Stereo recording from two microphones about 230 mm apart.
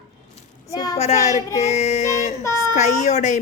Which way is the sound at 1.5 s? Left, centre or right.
Left.